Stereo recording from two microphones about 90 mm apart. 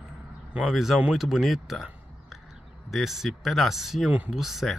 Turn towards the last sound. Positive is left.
turn(degrees=-5)  # may be behind; listen again after turning